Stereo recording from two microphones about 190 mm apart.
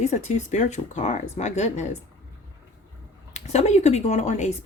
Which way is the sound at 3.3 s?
35° left (ahead or behind).